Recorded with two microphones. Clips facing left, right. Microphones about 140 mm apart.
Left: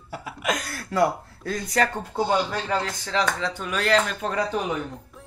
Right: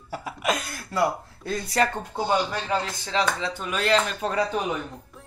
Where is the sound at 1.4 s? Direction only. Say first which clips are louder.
Even; 25° right (ahead or behind).